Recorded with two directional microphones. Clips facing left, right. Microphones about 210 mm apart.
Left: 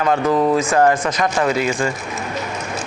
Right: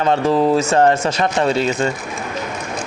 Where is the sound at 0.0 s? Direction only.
30° right (ahead or behind).